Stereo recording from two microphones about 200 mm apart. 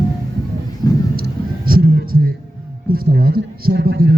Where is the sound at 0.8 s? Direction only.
20° left (ahead or behind).